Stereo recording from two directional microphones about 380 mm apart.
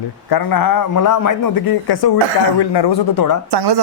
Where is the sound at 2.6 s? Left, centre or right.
Left.